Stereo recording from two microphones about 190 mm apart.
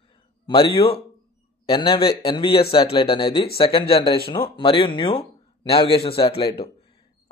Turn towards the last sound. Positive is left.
turn(degrees=30)  # may be behind; listen again after turning